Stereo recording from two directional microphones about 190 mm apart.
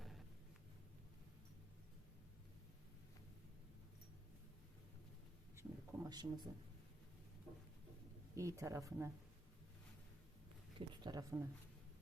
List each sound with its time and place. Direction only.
5.5 s a sound: 15° right (ahead or behind)
8.4 s speech: 15° right (ahead or behind)
10.8 s speech: 20° right (ahead or behind)